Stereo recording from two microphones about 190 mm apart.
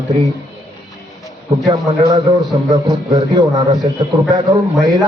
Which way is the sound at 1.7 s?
20° right (ahead or behind).